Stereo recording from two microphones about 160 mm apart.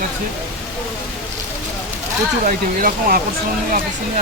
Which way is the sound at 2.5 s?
60° right (ahead or behind).